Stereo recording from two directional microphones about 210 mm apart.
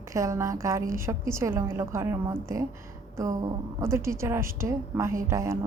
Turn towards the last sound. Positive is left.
turn(degrees=-15)  # may be behind; listen again after turning